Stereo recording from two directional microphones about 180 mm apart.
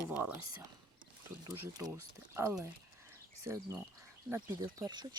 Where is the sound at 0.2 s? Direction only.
15° right (ahead or behind).